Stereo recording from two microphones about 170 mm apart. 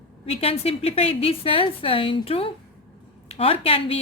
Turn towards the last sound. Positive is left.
turn(degrees=35)  # may be behind; listen again after turning